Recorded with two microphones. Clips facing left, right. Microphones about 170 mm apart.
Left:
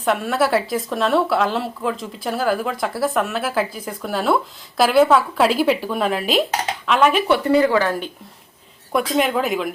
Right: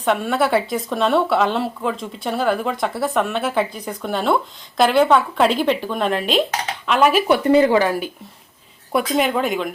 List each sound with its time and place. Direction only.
0.0 s speech: centre (ahead or behind)
7.4 s speech: 20° right (ahead or behind); by 9.7 s centre (ahead or behind)